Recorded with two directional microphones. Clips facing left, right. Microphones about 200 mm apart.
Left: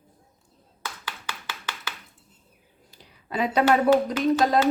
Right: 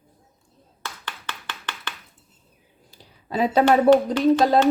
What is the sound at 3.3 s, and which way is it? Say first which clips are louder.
Speech: right 4 dB; 35° right (ahead or behind).